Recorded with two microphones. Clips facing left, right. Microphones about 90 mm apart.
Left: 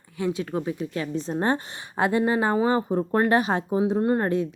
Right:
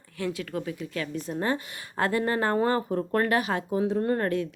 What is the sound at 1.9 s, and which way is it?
Speech, 20° left (ahead or behind).